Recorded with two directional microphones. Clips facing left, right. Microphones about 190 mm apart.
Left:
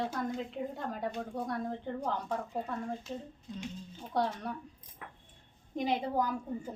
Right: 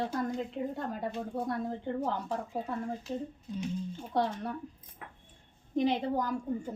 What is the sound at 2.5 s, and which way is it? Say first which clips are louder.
Speech: right 1 dB; centre (ahead or behind).